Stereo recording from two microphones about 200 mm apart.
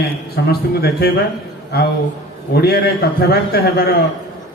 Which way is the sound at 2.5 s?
55° left (ahead or behind).